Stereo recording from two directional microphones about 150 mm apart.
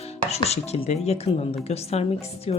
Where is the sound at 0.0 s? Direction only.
45° left (ahead or behind).